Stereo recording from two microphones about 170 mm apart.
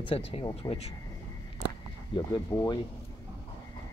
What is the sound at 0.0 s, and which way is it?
Speech, 30° left (ahead or behind).